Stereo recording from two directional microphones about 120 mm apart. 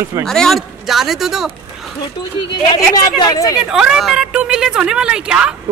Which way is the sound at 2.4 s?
35° left (ahead or behind).